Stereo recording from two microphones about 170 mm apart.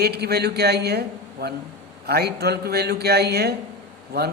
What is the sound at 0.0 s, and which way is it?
Speech, 70° right (ahead or behind).